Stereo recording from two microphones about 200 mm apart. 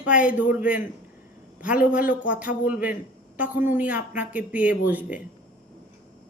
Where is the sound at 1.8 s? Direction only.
40° left (ahead or behind).